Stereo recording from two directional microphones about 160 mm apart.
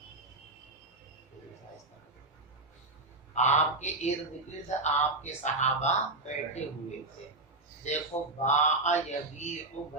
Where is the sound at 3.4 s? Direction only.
45° left (ahead or behind).